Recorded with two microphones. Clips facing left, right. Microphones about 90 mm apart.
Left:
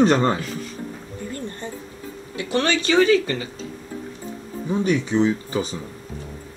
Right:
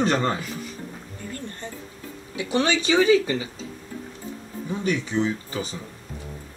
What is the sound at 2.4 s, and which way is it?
Speech, 10° right (ahead or behind).